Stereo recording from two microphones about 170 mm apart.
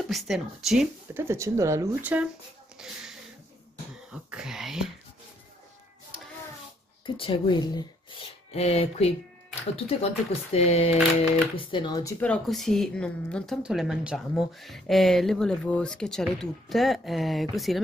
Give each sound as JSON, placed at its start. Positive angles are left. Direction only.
{"t": 0.0, "sound": "speech", "side_deg": 0}
{"t": 1.1, "sound": "speech", "side_deg": -15}
{"t": 4.1, "sound": "speech", "side_deg": -5}
{"t": 7.2, "sound": "speech", "side_deg": 30}
{"t": 8.5, "sound": "speech", "side_deg": 35}
{"t": 12.2, "sound": "speech", "side_deg": 5}